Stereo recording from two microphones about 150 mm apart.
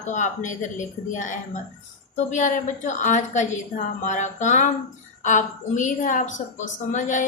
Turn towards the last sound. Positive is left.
turn(degrees=55)  # may be behind; listen again after turning